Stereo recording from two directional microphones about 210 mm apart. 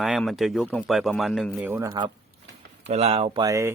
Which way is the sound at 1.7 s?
20° right (ahead or behind).